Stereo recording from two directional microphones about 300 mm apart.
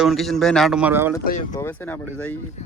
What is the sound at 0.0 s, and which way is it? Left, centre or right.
Speech, centre.